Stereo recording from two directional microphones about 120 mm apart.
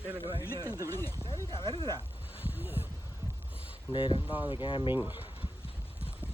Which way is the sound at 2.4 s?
15° right (ahead or behind).